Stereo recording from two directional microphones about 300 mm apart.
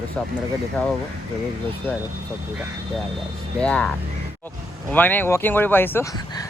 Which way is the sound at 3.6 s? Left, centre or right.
Centre.